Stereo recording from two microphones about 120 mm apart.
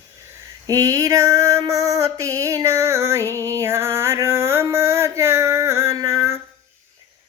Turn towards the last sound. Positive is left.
turn(degrees=-25)  # may be behind; listen again after turning